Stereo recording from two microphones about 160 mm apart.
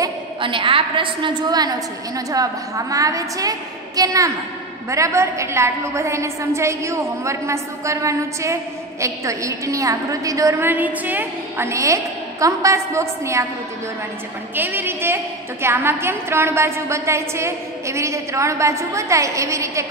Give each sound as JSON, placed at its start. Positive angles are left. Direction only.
{"t": 0.4, "sound": "a woman's voice", "side_deg": -30}
{"t": 14.5, "sound": "a woman's voice", "side_deg": -10}